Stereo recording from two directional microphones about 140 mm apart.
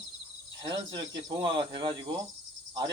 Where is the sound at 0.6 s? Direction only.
30° right (ahead or behind).